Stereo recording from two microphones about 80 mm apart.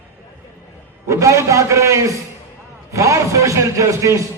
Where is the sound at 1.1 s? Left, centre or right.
Right.